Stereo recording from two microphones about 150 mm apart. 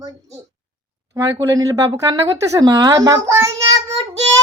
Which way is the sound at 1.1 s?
25° right (ahead or behind).